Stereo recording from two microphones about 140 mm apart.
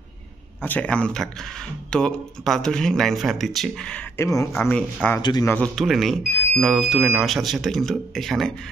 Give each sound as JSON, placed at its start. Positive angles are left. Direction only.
{"t": 0.6, "sound": "speech", "side_deg": 10}
{"t": 4.2, "sound": "speech", "side_deg": 20}
{"t": 4.6, "sound": "speech", "side_deg": 5}
{"t": 5.2, "sound": "speech", "side_deg": 30}
{"t": 5.8, "sound": "speech", "side_deg": 0}